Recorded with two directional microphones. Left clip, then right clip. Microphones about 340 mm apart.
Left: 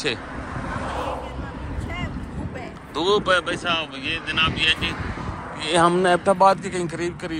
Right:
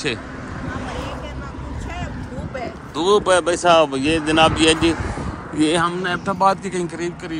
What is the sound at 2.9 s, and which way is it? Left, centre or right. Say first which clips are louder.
Speech: right 4 dB; centre.